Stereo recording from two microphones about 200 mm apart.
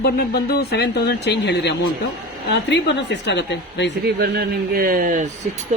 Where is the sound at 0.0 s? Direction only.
50° left (ahead or behind).